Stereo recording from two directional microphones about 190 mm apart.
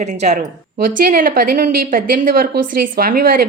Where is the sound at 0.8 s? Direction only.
50° right (ahead or behind).